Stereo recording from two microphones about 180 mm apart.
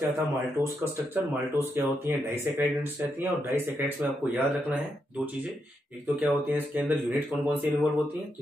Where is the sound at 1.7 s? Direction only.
10° right (ahead or behind).